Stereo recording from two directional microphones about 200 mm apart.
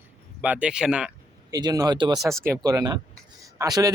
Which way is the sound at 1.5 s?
20° right (ahead or behind).